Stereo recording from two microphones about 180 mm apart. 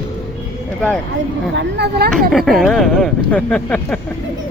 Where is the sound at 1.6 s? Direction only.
70° right (ahead or behind).